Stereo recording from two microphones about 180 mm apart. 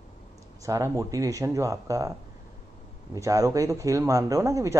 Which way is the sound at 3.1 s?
20° right (ahead or behind).